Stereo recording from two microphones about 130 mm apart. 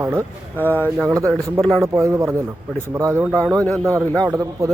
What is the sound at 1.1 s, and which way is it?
Speech, 25° right (ahead or behind).